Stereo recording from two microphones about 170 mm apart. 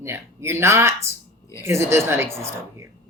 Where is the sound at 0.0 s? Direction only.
15° right (ahead or behind).